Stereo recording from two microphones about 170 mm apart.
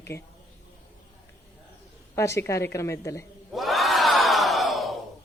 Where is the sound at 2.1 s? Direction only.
15° left (ahead or behind).